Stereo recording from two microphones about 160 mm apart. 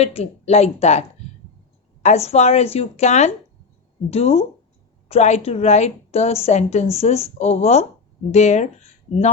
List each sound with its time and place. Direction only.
0.0 s a woman's voice: 40° left (ahead or behind)